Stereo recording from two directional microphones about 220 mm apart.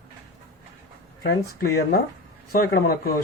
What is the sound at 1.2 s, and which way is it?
Speech, 45° left (ahead or behind).